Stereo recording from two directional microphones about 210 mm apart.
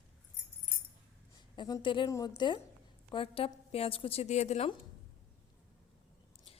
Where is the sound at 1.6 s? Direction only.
20° left (ahead or behind).